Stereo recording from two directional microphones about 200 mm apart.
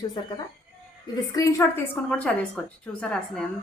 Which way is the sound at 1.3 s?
15° left (ahead or behind).